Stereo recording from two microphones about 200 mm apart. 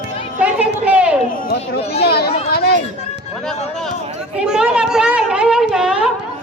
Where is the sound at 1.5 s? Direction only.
55° left (ahead or behind).